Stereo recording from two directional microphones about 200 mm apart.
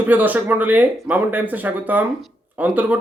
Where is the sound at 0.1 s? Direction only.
10° right (ahead or behind).